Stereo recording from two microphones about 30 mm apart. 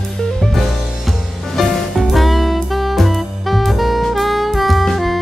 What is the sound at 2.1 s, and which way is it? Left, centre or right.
Saxophone, centre.